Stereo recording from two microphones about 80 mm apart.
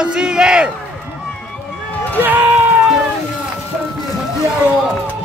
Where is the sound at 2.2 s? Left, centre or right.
Right.